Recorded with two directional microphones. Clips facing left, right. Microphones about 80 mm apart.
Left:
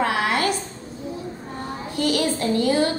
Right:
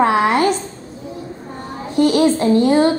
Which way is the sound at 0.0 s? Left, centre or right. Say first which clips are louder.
Right 7 dB; right.